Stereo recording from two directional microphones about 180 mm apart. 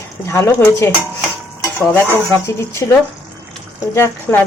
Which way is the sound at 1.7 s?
10° left (ahead or behind).